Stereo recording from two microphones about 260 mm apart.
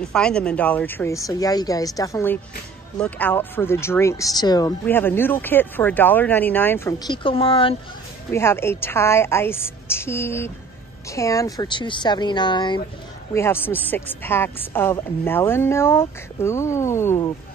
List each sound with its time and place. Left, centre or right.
0.0 s speech: centre; by 7.7 s left
8.3 s speech: centre